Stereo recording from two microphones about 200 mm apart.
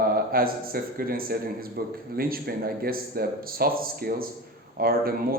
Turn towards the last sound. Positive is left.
turn(degrees=-50)  # may be behind; listen again after turning